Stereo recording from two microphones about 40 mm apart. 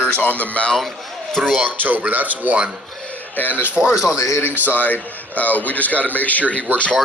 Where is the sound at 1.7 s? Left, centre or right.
Right.